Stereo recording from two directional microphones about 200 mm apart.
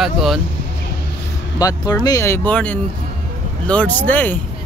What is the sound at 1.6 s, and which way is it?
Speech, 15° left (ahead or behind).